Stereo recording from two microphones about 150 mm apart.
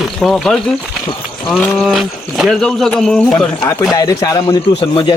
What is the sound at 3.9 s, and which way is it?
A man's voice, 25° left (ahead or behind).